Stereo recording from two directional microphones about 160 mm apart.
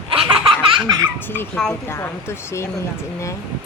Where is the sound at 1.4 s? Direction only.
5° left (ahead or behind).